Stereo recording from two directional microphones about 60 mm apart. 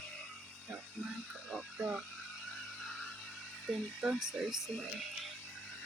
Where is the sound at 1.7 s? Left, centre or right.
Right.